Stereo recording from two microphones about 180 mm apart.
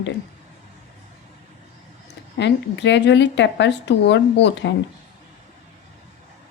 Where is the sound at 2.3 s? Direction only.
75° left (ahead or behind).